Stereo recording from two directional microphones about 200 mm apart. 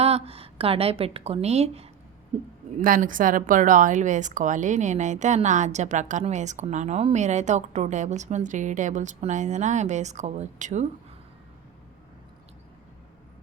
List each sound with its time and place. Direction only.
0.0 s speech: 30° right (ahead or behind)
2.8 s a woman's voice: 45° right (ahead or behind)